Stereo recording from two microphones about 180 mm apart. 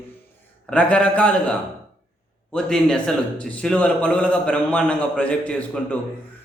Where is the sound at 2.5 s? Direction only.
5° left (ahead or behind).